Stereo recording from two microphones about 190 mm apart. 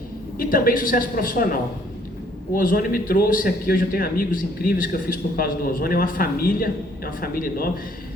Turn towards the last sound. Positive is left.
turn(degrees=50)  # may be behind; listen again after turning